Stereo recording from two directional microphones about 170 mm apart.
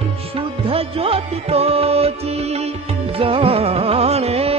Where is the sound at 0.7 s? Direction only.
35° right (ahead or behind).